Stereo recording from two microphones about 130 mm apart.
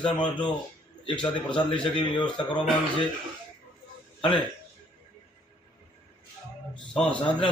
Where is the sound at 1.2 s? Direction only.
40° left (ahead or behind).